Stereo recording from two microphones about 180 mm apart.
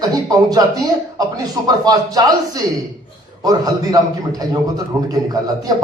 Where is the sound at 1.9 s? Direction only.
20° right (ahead or behind).